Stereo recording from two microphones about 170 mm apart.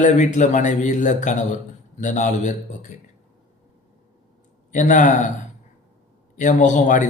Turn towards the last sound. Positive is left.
turn(degrees=50)  # may be behind; listen again after turning